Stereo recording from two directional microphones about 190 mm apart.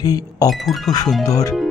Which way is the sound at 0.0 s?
20° left (ahead or behind).